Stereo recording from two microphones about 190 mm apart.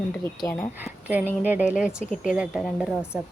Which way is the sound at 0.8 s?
10° right (ahead or behind).